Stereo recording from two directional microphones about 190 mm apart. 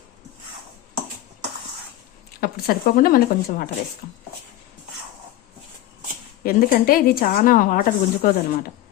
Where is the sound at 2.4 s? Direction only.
50° left (ahead or behind).